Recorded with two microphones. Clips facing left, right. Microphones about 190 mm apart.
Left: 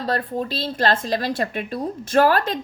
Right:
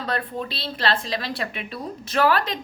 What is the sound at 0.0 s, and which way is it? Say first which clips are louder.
Speech: left 4 dB; 40° left (ahead or behind).